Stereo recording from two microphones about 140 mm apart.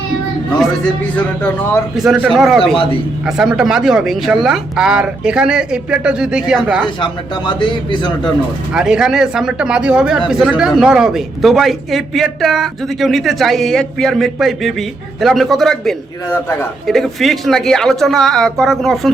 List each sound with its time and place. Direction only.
1.1 s speech: 10° left (ahead or behind)
2.0 s speech: 5° right (ahead or behind)
7.0 s a man's voice: 35° left (ahead or behind)
8.7 s speech: 5° right (ahead or behind)
16.3 s speech: 15° left (ahead or behind)
16.8 s speech: centre (ahead or behind)